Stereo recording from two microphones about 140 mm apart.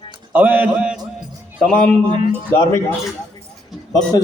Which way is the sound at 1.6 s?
5° left (ahead or behind).